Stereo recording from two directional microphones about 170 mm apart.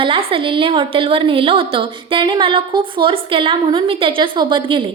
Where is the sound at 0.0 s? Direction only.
35° right (ahead or behind).